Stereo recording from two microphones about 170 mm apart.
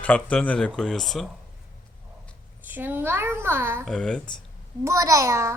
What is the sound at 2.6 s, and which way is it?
A child's voice, 10° right (ahead or behind).